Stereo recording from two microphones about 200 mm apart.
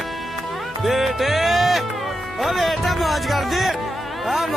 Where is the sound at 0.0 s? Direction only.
Centre (ahead or behind).